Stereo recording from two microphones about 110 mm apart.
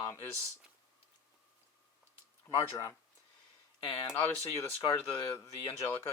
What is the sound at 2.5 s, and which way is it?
Speech, 30° left (ahead or behind).